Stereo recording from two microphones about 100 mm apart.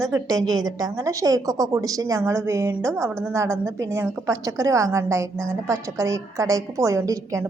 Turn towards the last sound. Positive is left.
turn(degrees=-35)  # may be behind; listen again after turning